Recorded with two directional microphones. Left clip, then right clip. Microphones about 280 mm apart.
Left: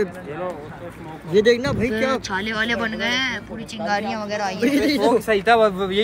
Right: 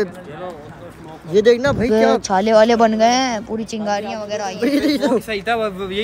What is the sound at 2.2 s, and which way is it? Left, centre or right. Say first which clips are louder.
Speech: right 11 dB; centre.